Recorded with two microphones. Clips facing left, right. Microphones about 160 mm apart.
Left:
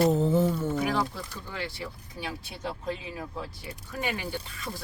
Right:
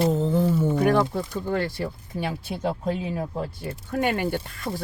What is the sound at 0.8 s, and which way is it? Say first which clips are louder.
Speech: right 8 dB; 60° right (ahead or behind).